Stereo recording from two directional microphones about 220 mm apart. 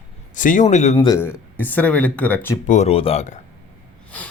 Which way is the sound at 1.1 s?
10° left (ahead or behind).